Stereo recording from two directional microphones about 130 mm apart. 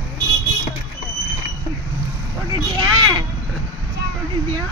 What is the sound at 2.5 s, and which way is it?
Vehicle, 35° right (ahead or behind).